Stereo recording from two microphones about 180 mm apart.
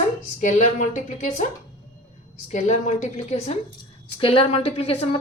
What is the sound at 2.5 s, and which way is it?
Speech, 40° left (ahead or behind).